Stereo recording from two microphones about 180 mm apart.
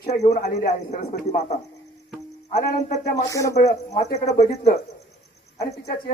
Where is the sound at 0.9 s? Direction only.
40° left (ahead or behind).